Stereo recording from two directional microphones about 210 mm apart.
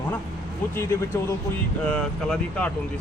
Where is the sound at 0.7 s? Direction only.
10° left (ahead or behind).